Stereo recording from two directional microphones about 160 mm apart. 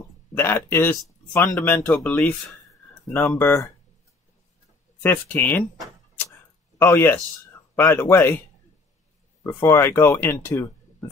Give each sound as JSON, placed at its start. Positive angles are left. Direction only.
{"t": 0.3, "sound": "speech", "side_deg": 15}
{"t": 5.0, "sound": "speech", "side_deg": 10}
{"t": 6.8, "sound": "speech", "side_deg": 15}
{"t": 9.5, "sound": "speech", "side_deg": 20}